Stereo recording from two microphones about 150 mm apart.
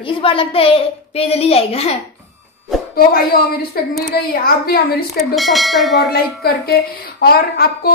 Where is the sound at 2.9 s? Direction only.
85° left.